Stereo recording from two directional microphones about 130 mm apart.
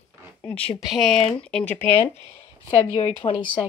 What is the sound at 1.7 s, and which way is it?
Speech, 15° left (ahead or behind).